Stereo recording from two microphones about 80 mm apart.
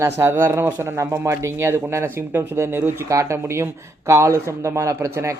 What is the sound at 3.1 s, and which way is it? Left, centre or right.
Speech, right.